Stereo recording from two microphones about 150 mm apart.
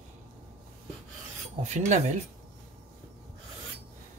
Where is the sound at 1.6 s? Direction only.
50° right (ahead or behind).